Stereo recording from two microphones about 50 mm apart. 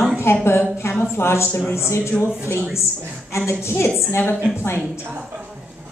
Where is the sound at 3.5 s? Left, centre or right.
Left.